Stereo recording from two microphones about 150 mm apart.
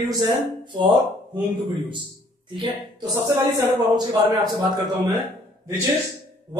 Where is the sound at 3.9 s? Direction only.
25° right (ahead or behind).